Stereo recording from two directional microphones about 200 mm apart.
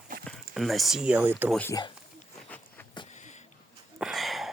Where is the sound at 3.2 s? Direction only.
35° left (ahead or behind).